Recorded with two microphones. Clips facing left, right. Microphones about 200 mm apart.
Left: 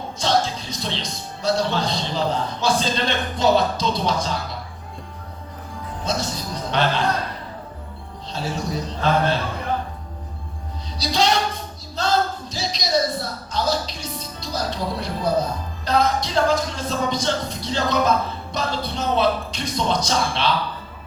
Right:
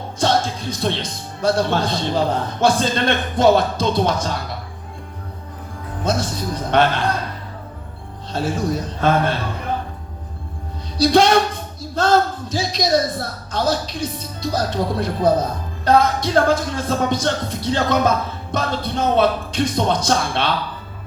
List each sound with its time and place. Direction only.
0.2 s speech: 55° right (ahead or behind)
6.1 s a man's voice: 55° right (ahead or behind)
8.3 s a man's voice: 55° right (ahead or behind)
10.9 s speech: 55° right (ahead or behind)